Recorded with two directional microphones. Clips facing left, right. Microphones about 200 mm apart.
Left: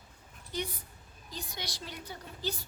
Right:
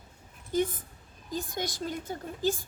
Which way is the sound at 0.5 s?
45° right (ahead or behind).